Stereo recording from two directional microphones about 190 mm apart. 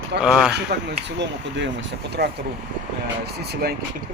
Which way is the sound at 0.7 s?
60° right (ahead or behind).